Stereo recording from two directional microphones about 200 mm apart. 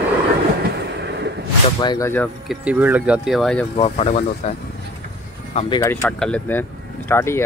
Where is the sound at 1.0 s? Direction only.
60° right (ahead or behind).